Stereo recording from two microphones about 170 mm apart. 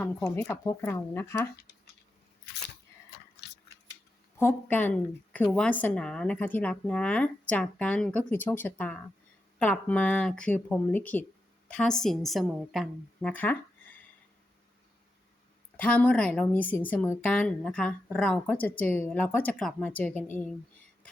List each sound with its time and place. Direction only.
0.3 s a woman's voice: 15° left (ahead or behind)
1.5 s speech: 75° left (ahead or behind)
4.4 s a woman's voice: 10° left (ahead or behind)
15.8 s a woman's voice: 10° left (ahead or behind)